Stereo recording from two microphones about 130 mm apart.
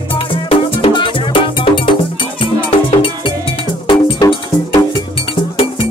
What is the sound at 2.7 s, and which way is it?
Music, 45° left (ahead or behind).